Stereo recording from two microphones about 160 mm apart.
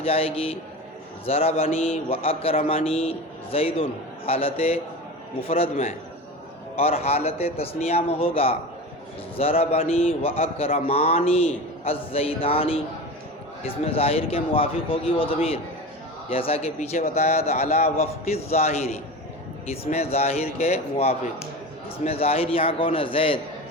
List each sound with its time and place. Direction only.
0.0 s a man's voice: 35° left (ahead or behind)